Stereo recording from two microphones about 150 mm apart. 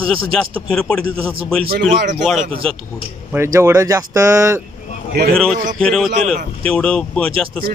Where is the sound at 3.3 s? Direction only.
20° right (ahead or behind).